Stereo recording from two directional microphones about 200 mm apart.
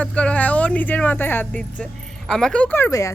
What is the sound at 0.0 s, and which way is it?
Speech, 5° left (ahead or behind).